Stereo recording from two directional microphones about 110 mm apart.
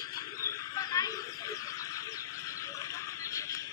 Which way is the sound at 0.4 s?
30° left (ahead or behind).